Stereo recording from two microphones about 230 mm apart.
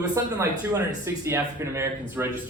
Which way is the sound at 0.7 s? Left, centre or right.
Centre.